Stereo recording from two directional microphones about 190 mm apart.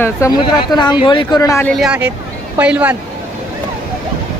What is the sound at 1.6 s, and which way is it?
Speech, 5° right (ahead or behind).